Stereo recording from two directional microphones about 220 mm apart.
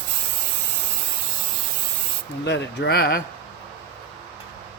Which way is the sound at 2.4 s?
50° left (ahead or behind).